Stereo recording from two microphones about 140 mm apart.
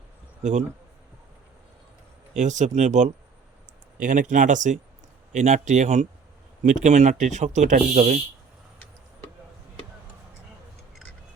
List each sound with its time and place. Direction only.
2.3 s speech: 60° right (ahead or behind)